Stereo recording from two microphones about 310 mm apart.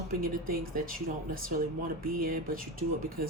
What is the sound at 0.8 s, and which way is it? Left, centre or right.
A woman's voice, right.